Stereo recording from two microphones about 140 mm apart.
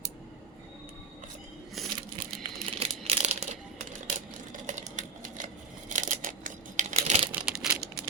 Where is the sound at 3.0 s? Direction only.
45° right (ahead or behind).